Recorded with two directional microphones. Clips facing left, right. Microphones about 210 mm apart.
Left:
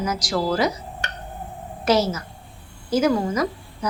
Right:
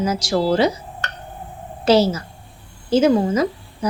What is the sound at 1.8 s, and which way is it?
A woman's voice, 30° right (ahead or behind).